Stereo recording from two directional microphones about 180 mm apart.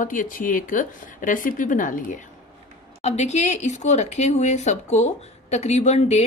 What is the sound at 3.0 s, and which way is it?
Speech, 35° left (ahead or behind).